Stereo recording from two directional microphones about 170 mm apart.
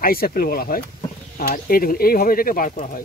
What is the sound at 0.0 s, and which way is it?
Speech, 60° left (ahead or behind).